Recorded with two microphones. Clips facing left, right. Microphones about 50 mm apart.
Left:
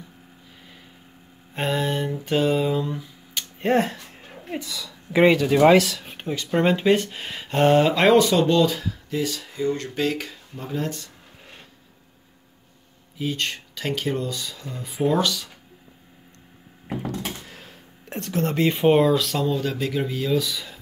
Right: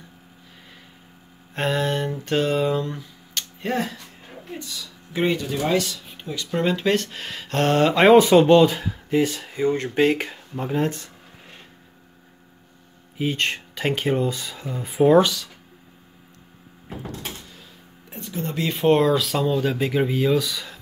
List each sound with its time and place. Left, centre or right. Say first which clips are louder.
1.5 s a sound: right 1 dB; centre
3.6 s speech: left 5 dB; left
5.4 s speech: left 7 dB; left
6.2 s speech: left 3 dB; left
6.8 s speech: left 2 dB; centre
8.2 s speech: right 5 dB; right
13.2 s speech: right 3 dB; right
14.9 s speech: right 6 dB; right
17.5 s a sound: left 2 dB; left
18.9 s speech: right 1 dB; centre; by 20.2 s right
20.2 s speech: right 2 dB; centre